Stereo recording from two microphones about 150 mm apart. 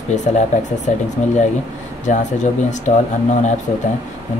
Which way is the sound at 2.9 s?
50° left (ahead or behind).